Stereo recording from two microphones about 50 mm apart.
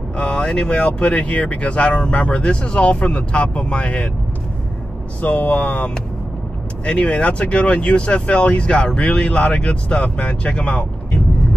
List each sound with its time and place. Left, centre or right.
0.2 s speech: left
5.2 s speech: left